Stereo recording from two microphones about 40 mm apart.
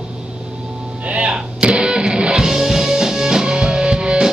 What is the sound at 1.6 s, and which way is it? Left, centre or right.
Music, right.